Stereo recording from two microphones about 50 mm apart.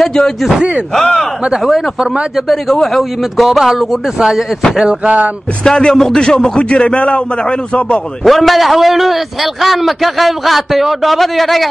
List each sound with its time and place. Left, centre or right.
0.0 s speech: centre
0.6 s speech: right
0.9 s speech: centre
2.3 s a man's voice: centre
4.7 s speech: right
5.6 s a man's voice: centre
8.2 s a man's voice: centre